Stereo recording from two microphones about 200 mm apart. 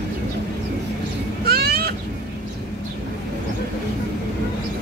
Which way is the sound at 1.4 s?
50° right (ahead or behind).